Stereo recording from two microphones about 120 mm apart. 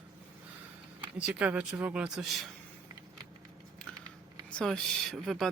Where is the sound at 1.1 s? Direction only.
10° right (ahead or behind).